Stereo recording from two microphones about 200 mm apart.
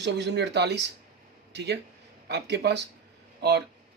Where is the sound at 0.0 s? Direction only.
60° right (ahead or behind).